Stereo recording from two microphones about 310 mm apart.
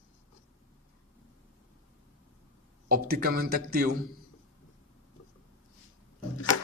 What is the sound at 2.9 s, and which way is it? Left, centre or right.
Speech, right.